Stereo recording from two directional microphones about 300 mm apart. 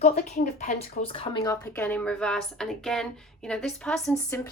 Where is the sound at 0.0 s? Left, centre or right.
Left.